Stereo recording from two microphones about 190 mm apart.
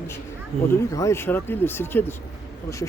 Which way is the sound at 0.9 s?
15° left (ahead or behind).